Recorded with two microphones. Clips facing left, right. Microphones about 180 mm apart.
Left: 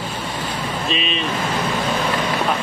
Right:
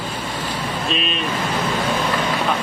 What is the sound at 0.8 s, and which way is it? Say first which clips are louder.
Speech: left 1 dB; centre (ahead or behind).